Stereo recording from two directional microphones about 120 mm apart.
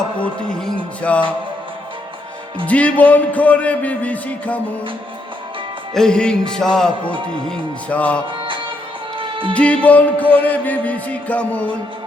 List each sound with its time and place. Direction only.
0.2 s music: 10° left (ahead or behind)
2.6 s music: 10° left (ahead or behind)
5.9 s music: 5° left (ahead or behind)
9.1 s music: 45° right (ahead or behind)
9.5 s music: 10° left (ahead or behind)